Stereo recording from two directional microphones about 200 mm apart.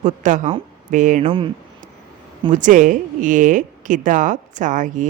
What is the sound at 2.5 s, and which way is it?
Speech, 40° right (ahead or behind).